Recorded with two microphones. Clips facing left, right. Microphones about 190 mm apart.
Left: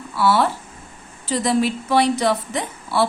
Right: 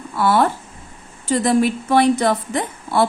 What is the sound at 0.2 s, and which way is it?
A woman's voice, 50° right (ahead or behind).